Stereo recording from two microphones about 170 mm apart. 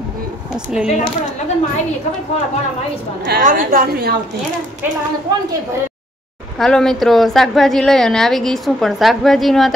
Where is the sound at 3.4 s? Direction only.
55° right (ahead or behind).